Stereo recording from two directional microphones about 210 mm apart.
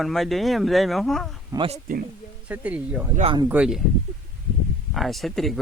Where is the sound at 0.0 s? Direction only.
Centre (ahead or behind).